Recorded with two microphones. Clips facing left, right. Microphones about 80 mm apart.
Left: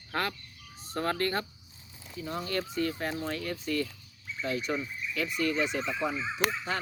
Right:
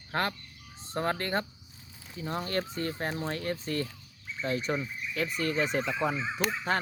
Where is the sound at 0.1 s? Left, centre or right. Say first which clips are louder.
Right 2 dB; right.